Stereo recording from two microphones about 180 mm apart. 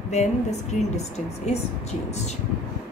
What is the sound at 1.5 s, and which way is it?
Speech, 35° left (ahead or behind).